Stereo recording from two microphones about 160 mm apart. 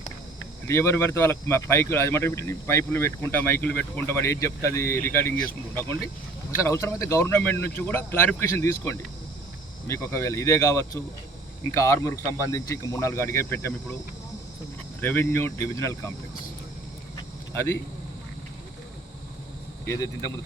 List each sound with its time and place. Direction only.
0.7 s speech: 15° left (ahead or behind)
6.5 s speech: 15° left (ahead or behind)
15.0 s speech: 15° left (ahead or behind)
17.5 s speech: 15° left (ahead or behind)